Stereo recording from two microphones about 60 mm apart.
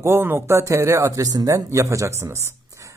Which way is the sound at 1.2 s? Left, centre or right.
Right.